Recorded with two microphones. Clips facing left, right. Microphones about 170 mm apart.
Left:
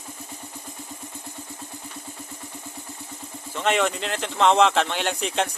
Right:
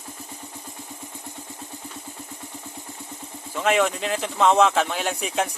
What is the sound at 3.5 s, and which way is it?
Speech, 5° right (ahead or behind).